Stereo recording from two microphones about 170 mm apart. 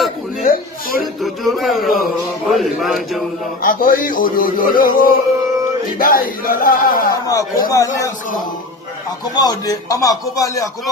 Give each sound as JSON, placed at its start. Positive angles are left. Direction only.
{"t": 0.4, "sound": "a sound", "side_deg": 55}
{"t": 1.2, "sound": "a man's voice", "side_deg": 0}
{"t": 3.6, "sound": "speech", "side_deg": 55}
{"t": 7.1, "sound": "speech", "side_deg": 20}
{"t": 9.4, "sound": "speech", "side_deg": 20}